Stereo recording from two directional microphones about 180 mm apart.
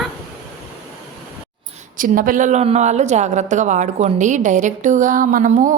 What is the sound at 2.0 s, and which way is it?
A woman's voice, 50° right (ahead or behind).